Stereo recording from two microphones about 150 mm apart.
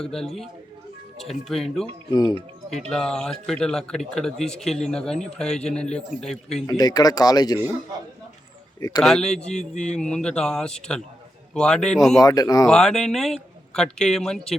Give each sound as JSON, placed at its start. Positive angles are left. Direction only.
{"t": 0.0, "sound": "a man's voice", "side_deg": 5}
{"t": 6.7, "sound": "speech", "side_deg": 25}
{"t": 9.0, "sound": "a man's voice", "side_deg": 5}
{"t": 9.6, "sound": "a man's voice", "side_deg": 50}
{"t": 10.0, "sound": "a man's voice", "side_deg": 5}
{"t": 12.2, "sound": "speech", "side_deg": 25}
{"t": 12.6, "sound": "a man's voice", "side_deg": 5}